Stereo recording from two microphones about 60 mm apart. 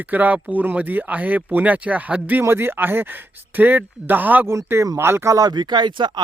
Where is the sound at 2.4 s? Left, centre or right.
Right.